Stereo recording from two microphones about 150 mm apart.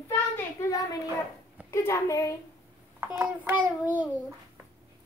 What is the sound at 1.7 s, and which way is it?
Speech, 20° left (ahead or behind).